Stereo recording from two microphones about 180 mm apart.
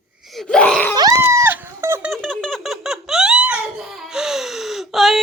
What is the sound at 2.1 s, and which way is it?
Squeak, 5° left (ahead or behind).